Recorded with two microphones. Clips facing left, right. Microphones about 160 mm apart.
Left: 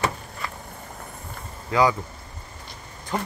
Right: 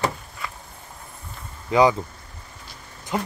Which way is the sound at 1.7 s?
20° right (ahead or behind).